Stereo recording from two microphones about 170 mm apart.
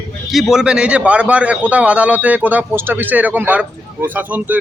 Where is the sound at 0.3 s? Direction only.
Centre (ahead or behind).